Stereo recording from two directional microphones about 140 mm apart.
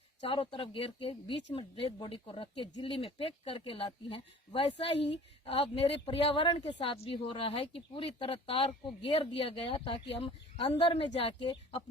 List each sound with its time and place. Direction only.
0.3 s speech: 40° left (ahead or behind)